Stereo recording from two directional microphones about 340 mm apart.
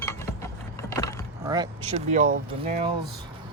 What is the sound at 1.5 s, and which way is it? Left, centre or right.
Speech, centre.